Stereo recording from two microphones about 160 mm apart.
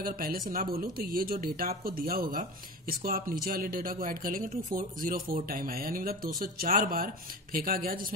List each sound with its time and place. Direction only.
0.0 s speech: 65° right (ahead or behind)